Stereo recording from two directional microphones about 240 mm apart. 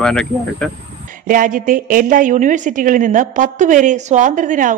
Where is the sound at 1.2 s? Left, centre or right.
Right.